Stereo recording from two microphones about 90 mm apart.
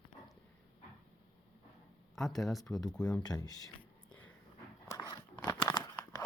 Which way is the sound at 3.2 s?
45° left (ahead or behind).